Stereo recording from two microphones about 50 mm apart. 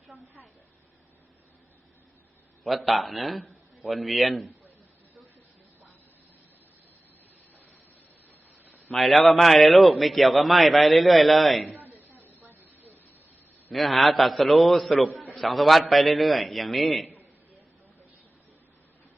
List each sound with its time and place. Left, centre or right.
2.6 s a man's voice: centre
9.0 s a man's voice: centre
11.7 s a sound: right
13.7 s a man's voice: centre